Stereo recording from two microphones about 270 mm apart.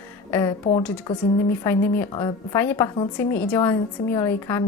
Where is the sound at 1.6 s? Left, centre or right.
Centre.